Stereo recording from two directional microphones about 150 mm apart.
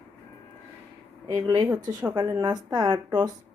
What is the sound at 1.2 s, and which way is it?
Speech, 25° right (ahead or behind).